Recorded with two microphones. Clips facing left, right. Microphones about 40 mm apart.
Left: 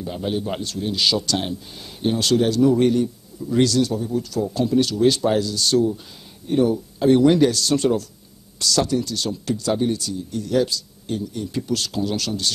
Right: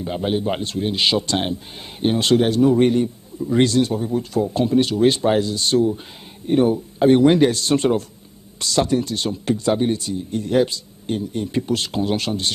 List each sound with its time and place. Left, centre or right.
0.0 s speech: right